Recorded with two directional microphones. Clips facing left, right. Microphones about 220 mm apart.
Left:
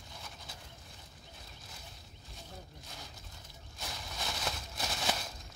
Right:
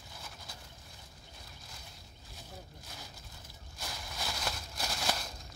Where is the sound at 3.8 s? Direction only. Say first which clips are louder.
Even; centre (ahead or behind).